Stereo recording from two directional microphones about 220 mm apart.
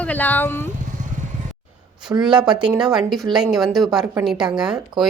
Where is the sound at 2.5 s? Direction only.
5° right (ahead or behind).